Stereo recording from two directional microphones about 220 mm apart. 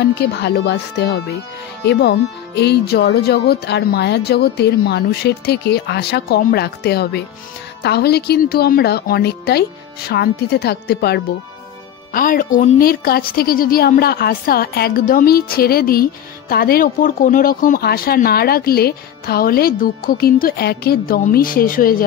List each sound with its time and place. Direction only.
0.0 s a woman's voice: 50° left (ahead or behind)